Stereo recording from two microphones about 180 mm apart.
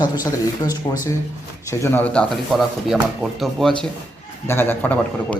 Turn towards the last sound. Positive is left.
turn(degrees=10)  # may be behind; listen again after turning